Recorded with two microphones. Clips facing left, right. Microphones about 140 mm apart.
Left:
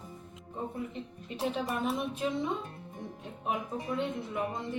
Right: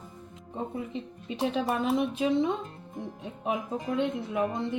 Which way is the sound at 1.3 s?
90° right.